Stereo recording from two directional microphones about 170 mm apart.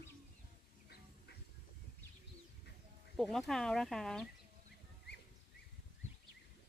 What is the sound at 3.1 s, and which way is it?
Speech, centre (ahead or behind).